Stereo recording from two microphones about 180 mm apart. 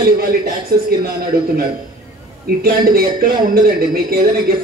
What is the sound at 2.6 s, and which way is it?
Speech, 55° right (ahead or behind).